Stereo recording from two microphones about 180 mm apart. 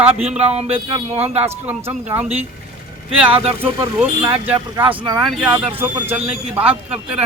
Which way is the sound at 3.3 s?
35° right (ahead or behind).